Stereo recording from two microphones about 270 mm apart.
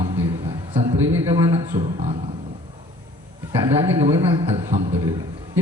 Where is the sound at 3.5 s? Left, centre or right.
Centre.